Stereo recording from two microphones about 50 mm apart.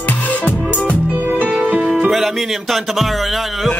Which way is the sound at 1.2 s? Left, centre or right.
Right.